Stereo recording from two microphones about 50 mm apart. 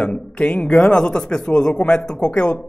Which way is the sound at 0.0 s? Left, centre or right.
Left.